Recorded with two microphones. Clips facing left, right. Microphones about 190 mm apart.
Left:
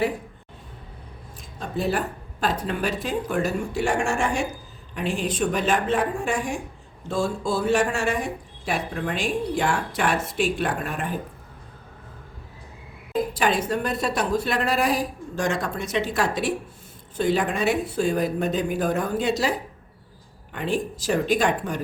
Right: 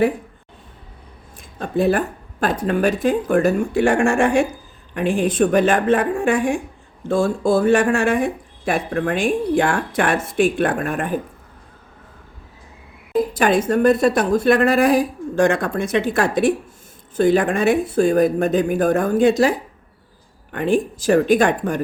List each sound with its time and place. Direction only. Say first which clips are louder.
1.4 s speech: right 8 dB; 55° right (ahead or behind)
13.3 s speech: right 7 dB; 50° right (ahead or behind)